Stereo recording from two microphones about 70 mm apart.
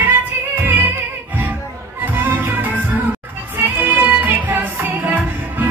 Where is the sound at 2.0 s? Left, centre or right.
Right.